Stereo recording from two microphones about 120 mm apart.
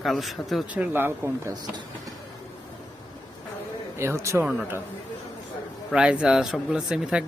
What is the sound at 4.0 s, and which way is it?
Speech, 25° right (ahead or behind).